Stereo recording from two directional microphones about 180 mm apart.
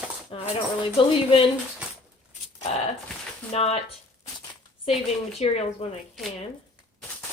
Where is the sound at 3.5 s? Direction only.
35° left (ahead or behind).